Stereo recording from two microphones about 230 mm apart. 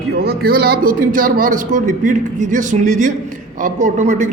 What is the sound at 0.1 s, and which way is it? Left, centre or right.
Speech, right.